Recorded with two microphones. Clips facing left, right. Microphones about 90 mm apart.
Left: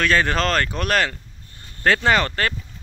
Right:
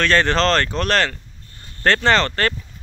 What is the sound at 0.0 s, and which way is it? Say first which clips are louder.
Speech: right 2 dB; 10° left (ahead or behind).